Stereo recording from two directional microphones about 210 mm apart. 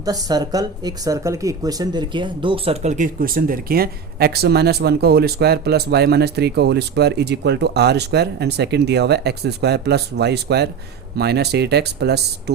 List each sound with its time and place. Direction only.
0.0 s speech: 15° right (ahead or behind); by 12.2 s 50° right (ahead or behind)